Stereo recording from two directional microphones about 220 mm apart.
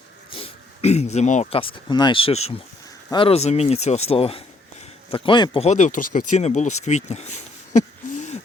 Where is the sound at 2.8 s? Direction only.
20° left (ahead or behind).